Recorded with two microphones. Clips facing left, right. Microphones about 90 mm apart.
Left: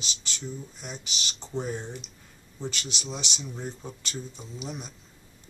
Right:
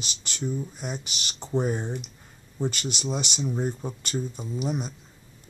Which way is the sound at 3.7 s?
15° right (ahead or behind).